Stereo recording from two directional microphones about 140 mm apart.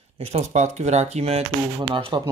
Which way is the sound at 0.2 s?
55° right (ahead or behind).